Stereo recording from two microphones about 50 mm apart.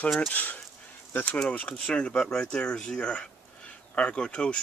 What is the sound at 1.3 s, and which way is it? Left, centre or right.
Speech, left.